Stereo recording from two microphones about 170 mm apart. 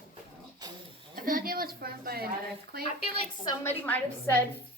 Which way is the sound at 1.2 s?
55° right (ahead or behind).